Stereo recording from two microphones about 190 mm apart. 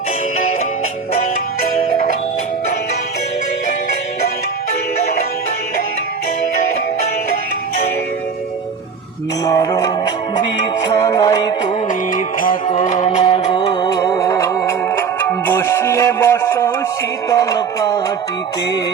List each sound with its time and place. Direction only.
9.4 s music: 20° left (ahead or behind)
11.9 s music: 45° left (ahead or behind)
13.2 s music: 25° left (ahead or behind)